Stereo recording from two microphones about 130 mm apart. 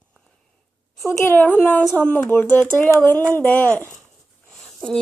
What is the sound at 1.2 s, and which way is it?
Speech, 15° left (ahead or behind).